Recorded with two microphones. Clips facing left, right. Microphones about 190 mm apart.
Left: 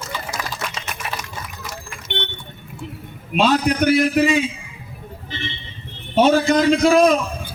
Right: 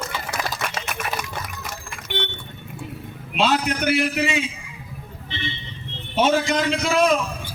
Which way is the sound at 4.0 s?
40° left (ahead or behind).